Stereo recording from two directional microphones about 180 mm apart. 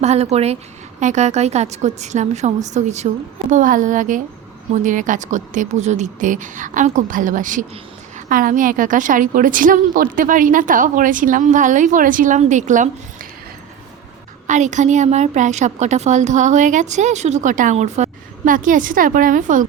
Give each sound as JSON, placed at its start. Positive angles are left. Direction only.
{"t": 0.0, "sound": "a woman's voice", "side_deg": -35}
{"t": 14.4, "sound": "a woman's voice", "side_deg": -40}